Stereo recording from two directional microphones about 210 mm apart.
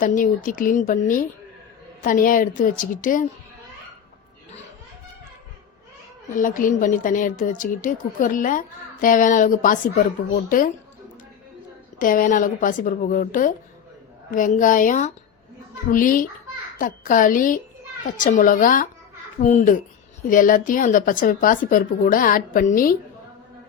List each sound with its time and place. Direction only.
0.0 s a woman's voice: 40° left (ahead or behind)
6.3 s a woman's voice: 40° left (ahead or behind)
11.9 s a woman's voice: 40° left (ahead or behind)